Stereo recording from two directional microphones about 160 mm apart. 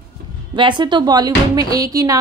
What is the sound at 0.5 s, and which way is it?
Speech, 30° right (ahead or behind).